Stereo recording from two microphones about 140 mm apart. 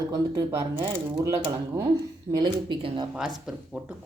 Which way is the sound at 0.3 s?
20° right (ahead or behind).